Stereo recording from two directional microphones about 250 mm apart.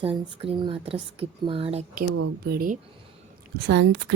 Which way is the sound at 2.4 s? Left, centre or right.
Right.